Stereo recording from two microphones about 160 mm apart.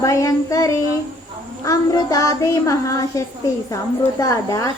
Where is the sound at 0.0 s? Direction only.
20° left (ahead or behind).